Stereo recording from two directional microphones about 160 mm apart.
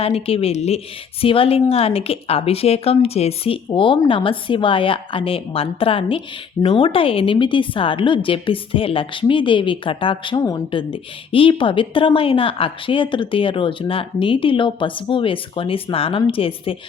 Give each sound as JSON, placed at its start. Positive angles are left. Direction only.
{"t": 0.0, "sound": "a woman's voice", "side_deg": 35}